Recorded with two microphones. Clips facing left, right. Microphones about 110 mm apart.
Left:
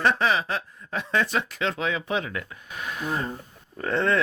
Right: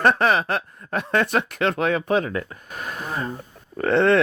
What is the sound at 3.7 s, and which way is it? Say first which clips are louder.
Speech: right 6 dB; 70° right (ahead or behind).